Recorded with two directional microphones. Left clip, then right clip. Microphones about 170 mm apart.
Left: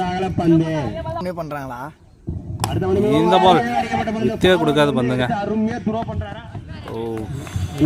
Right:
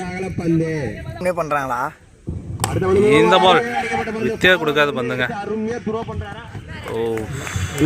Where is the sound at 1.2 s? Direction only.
25° right (ahead or behind).